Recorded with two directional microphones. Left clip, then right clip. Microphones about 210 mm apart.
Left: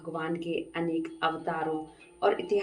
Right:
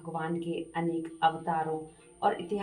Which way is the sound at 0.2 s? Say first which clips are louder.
Left 2 dB; 20° left (ahead or behind).